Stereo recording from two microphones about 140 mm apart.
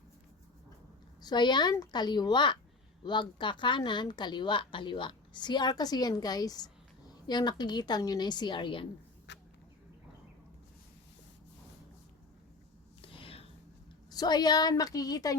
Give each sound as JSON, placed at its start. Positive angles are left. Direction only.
{"t": 1.2, "sound": "a woman's voice", "side_deg": 30}
{"t": 13.0, "sound": "a sound", "side_deg": 40}
{"t": 14.1, "sound": "a woman's voice", "side_deg": 30}